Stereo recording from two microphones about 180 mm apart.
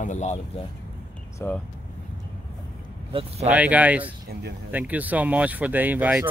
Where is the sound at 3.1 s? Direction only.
30° right (ahead or behind).